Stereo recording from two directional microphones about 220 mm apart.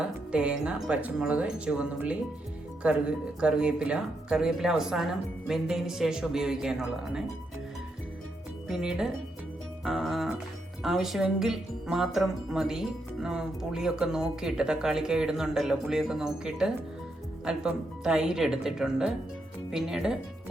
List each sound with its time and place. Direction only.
0.0 s speech: 5° right (ahead or behind)
8.6 s speech: centre (ahead or behind)